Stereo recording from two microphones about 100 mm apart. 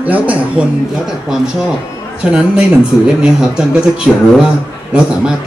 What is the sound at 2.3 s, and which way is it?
A man's voice, 10° right (ahead or behind).